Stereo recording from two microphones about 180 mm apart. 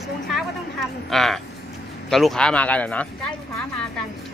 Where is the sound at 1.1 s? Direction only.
Centre (ahead or behind).